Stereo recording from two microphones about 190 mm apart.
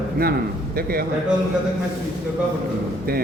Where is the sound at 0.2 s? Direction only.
50° right (ahead or behind).